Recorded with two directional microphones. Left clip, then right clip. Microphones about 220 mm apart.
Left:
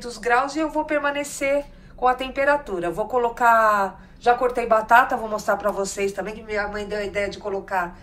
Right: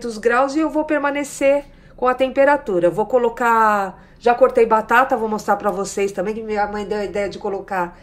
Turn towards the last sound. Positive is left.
turn(degrees=-25)  # may be behind; listen again after turning